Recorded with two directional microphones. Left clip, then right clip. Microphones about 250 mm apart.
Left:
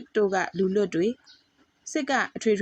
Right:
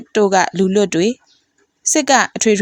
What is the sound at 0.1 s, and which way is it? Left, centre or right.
Speech, right.